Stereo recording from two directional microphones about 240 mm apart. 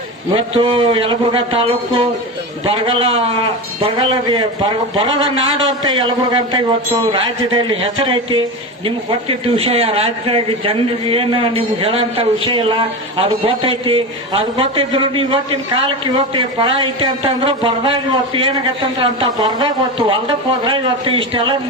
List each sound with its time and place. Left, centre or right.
0.3 s speech: right
9.6 s speech: right